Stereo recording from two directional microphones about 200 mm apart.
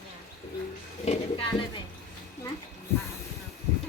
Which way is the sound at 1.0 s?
35° left (ahead or behind).